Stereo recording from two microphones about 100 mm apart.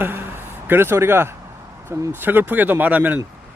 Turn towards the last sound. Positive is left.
turn(degrees=-15)  # may be behind; listen again after turning